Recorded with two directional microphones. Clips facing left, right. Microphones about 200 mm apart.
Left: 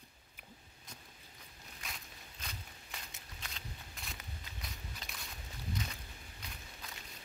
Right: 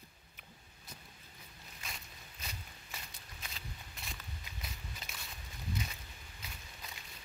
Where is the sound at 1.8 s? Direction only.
5° right (ahead or behind).